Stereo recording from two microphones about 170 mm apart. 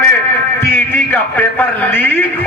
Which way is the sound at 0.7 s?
10° left (ahead or behind).